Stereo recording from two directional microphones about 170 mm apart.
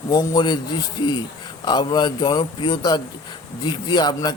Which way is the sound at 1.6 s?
25° left (ahead or behind).